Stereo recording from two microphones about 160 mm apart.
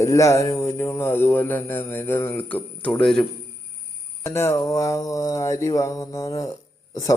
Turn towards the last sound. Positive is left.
turn(degrees=20)  # may be behind; listen again after turning